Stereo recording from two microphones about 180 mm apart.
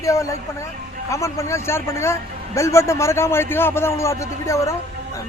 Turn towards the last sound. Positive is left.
turn(degrees=15)  # may be behind; listen again after turning